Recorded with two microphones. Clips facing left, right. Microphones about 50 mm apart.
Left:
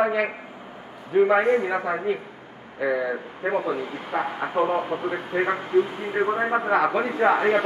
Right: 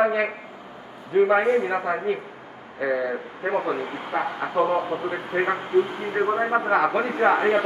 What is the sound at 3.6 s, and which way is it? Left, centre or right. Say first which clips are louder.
Speech: right 1 dB; right.